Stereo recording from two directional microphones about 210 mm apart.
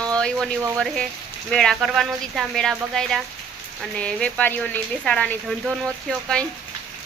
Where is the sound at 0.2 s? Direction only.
5° left (ahead or behind).